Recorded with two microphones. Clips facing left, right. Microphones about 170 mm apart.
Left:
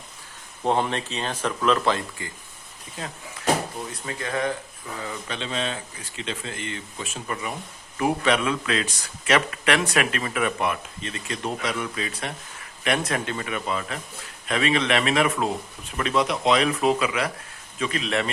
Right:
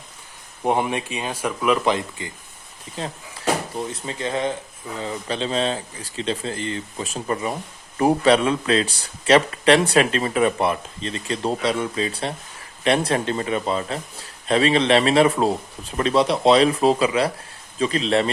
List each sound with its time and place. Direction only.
0.6 s speech: 10° right (ahead or behind); by 18.3 s 30° right (ahead or behind)